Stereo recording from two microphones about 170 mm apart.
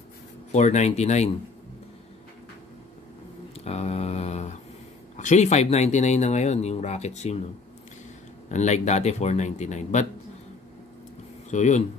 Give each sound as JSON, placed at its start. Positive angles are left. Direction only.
{"t": 0.5, "sound": "speech", "side_deg": 45}
{"t": 3.5, "sound": "mantra", "side_deg": 40}
{"t": 5.1, "sound": "speech", "side_deg": 45}
{"t": 8.5, "sound": "speech", "side_deg": 45}
{"t": 11.5, "sound": "speech", "side_deg": 45}